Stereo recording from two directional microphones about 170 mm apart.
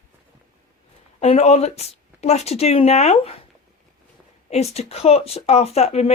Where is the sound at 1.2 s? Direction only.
40° left (ahead or behind).